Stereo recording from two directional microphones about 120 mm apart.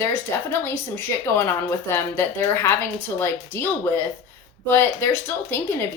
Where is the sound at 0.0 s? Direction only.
20° left (ahead or behind).